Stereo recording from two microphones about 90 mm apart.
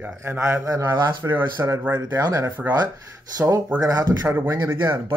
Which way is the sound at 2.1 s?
45° right (ahead or behind).